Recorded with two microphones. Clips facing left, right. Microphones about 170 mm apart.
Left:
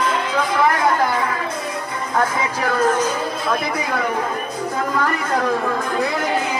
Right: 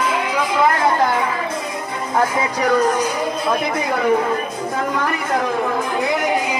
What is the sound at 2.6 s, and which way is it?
Speech, 15° right (ahead or behind).